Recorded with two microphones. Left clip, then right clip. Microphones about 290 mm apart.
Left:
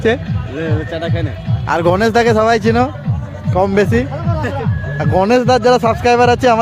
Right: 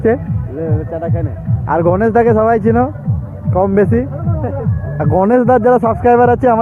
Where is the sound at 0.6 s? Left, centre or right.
Left.